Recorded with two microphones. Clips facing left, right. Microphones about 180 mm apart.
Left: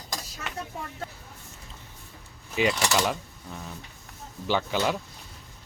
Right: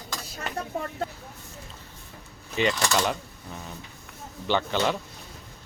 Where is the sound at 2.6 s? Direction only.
5° left (ahead or behind).